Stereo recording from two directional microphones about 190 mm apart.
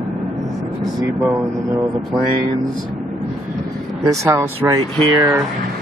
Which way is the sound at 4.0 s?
15° right (ahead or behind).